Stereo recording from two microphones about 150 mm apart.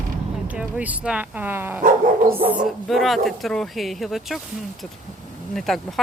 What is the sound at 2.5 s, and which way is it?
Speech, centre (ahead or behind).